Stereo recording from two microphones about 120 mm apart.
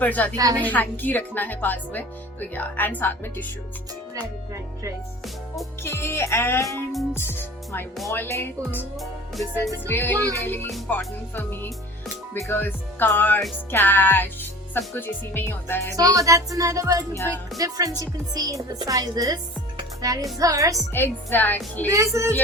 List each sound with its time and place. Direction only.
0.0 s speech: 15° left (ahead or behind)
4.1 s speech: 30° right (ahead or behind)
5.8 s speech: 20° left (ahead or behind)
9.0 s music: centre (ahead or behind)
9.8 s speech: 15° left (ahead or behind)
16.0 s speech: 30° right (ahead or behind)
17.2 s speech: 15° left (ahead or behind)
17.6 s a woman's voice: 30° right (ahead or behind)
20.9 s speech: 15° left (ahead or behind)
21.8 s speech: 25° right (ahead or behind)